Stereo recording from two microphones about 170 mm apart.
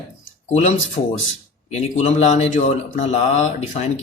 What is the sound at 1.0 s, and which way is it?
Speech, 70° left (ahead or behind).